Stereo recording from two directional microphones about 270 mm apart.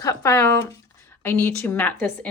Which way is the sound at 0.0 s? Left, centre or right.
Centre.